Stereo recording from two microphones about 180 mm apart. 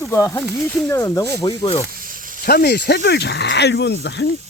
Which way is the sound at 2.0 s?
50° right (ahead or behind).